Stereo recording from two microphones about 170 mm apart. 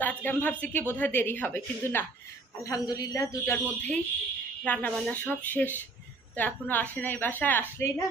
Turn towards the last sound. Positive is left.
turn(degrees=10)  # may be behind; listen again after turning